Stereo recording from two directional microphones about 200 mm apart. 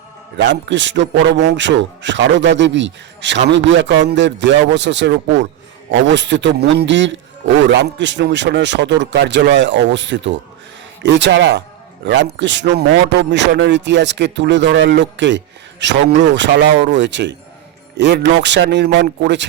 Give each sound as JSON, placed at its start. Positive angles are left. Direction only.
{"t": 0.3, "sound": "a man's voice", "side_deg": -65}